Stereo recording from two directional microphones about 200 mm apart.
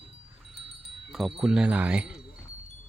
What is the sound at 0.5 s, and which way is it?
Wind chime, 60° left (ahead or behind).